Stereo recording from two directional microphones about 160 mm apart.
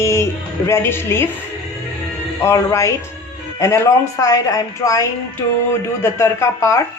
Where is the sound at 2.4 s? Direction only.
20° left (ahead or behind).